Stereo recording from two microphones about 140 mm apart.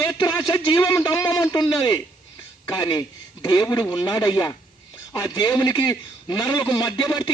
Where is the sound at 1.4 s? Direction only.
25° left (ahead or behind).